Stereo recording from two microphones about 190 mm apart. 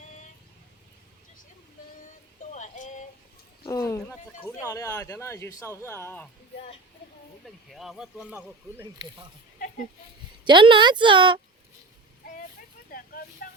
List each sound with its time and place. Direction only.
2.5 s a sound: 40° left (ahead or behind)
3.7 s speech: 15° left (ahead or behind)
7.4 s speech: centre (ahead or behind)
10.4 s speech: 25° right (ahead or behind)
12.9 s vehicle: 50° left (ahead or behind)